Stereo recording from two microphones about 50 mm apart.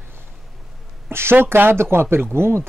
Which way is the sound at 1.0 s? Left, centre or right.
Right.